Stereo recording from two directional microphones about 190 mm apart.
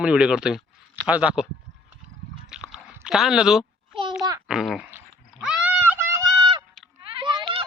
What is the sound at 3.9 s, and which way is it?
Speech, 25° right (ahead or behind).